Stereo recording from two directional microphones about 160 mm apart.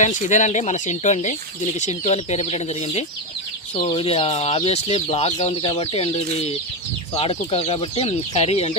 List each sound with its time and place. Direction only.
0.0 s speech: 50° left (ahead or behind)